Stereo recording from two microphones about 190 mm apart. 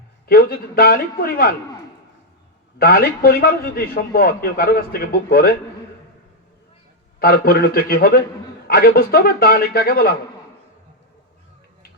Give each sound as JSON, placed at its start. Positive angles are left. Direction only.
{"t": 0.3, "sound": "a man's voice", "side_deg": 55}
{"t": 2.7, "sound": "a man's voice", "side_deg": 50}
{"t": 7.2, "sound": "a man's voice", "side_deg": 50}